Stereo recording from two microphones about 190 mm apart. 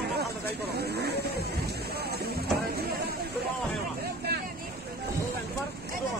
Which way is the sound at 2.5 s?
55° right (ahead or behind).